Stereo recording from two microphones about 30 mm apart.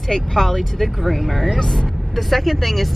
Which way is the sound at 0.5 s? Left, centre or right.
Centre.